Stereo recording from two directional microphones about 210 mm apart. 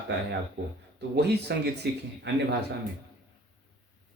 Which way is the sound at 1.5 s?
50° right (ahead or behind).